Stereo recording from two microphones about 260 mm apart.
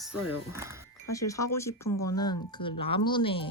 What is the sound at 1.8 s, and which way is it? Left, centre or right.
Speech, left.